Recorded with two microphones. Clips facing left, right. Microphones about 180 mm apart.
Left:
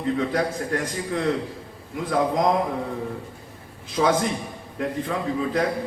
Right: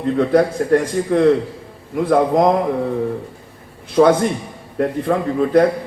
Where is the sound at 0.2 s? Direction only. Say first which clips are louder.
Right 9 dB; 60° right (ahead or behind).